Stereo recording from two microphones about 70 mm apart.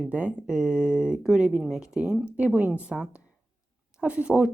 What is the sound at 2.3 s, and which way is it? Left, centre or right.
Speech, right.